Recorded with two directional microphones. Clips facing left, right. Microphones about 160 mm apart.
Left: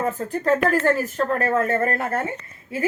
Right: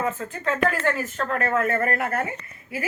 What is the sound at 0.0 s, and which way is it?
A woman's voice, 40° left (ahead or behind).